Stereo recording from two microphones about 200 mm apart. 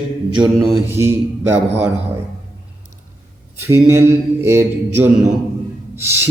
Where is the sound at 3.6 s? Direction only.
10° right (ahead or behind).